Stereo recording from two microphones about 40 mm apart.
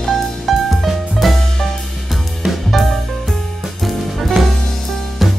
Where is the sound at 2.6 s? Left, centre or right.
Centre.